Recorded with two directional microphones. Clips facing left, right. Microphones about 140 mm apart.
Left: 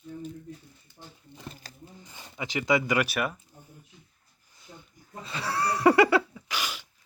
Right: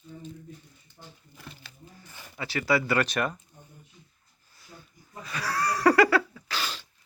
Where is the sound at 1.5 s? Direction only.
35° left (ahead or behind).